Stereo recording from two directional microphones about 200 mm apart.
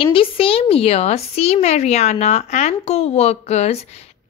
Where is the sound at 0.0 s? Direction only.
25° left (ahead or behind).